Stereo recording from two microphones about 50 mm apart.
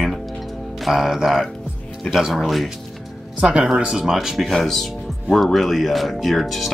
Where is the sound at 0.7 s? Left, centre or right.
Centre.